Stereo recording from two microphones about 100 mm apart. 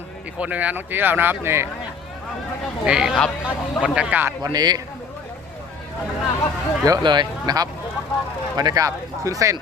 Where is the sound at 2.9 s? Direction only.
5° right (ahead or behind).